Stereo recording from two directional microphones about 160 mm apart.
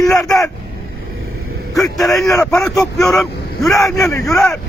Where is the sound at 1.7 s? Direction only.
Centre (ahead or behind).